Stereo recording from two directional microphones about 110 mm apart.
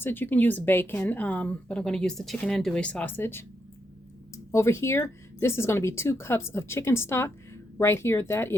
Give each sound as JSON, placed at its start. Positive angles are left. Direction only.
{"t": 0.0, "sound": "speech", "side_deg": 15}
{"t": 4.5, "sound": "speech", "side_deg": 25}